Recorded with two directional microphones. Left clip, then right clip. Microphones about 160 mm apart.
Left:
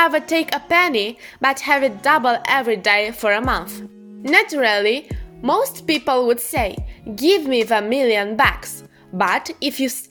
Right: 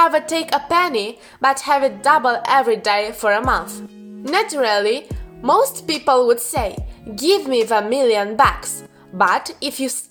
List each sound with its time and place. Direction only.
0.0 s a woman's voice: 20° left (ahead or behind)
5.4 s a woman's voice: 10° left (ahead or behind)